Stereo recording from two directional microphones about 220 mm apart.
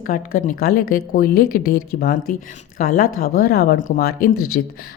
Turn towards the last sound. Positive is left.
turn(degrees=45)  # may be behind; listen again after turning